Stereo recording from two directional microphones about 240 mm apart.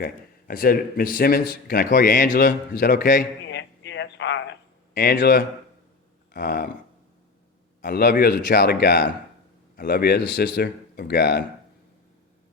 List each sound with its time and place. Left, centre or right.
0.0 s a man's voice: left
3.6 s a sound: left
4.9 s a man's voice: left
7.8 s a man's voice: left